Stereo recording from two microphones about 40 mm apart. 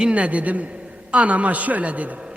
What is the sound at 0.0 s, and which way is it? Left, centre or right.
A man's voice, right.